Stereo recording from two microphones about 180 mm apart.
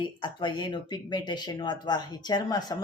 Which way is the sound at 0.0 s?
25° left (ahead or behind).